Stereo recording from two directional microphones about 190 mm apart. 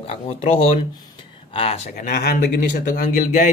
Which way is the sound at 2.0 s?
50° left (ahead or behind).